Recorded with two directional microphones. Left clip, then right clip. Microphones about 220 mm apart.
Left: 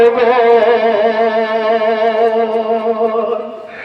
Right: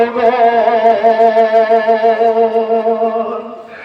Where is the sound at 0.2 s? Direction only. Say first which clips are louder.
Left 1 dB; 25° left (ahead or behind).